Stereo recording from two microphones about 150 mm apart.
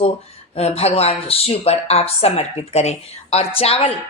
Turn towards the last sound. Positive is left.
turn(degrees=40)  # may be behind; listen again after turning